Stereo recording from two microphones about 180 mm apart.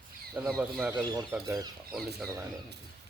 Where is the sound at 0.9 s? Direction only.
20° right (ahead or behind).